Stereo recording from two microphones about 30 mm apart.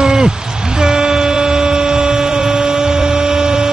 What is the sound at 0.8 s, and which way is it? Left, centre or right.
Vehicle horn, right.